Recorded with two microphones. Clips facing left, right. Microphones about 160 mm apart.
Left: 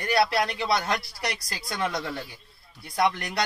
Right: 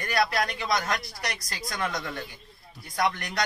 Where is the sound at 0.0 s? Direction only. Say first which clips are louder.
Left 3 dB; 30° left (ahead or behind).